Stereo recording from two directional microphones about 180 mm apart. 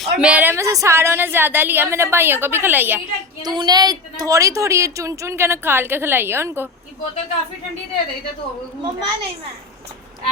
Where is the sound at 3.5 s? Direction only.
20° right (ahead or behind).